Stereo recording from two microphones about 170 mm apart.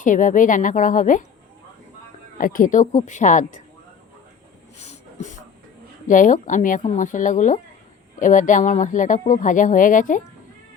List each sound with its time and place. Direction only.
0.0 s speech: 50° left (ahead or behind)
2.4 s speech: 55° left (ahead or behind)
4.8 s a sound: 40° left (ahead or behind)
6.1 s speech: 50° left (ahead or behind)